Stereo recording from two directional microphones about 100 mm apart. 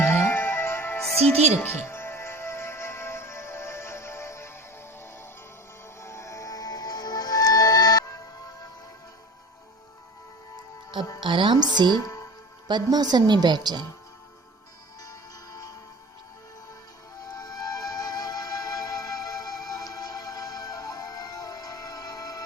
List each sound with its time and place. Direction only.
0.0 s music: 20° left (ahead or behind)
1.3 s a woman's voice: 90° right
1.5 s music: 25° left (ahead or behind)
6.0 s music: 30° left (ahead or behind)
11.2 s a woman's voice: 55° right (ahead or behind)
11.9 s music: 40° left (ahead or behind)
12.6 s a woman's voice: 45° right (ahead or behind)
17.3 s music: 40° left (ahead or behind)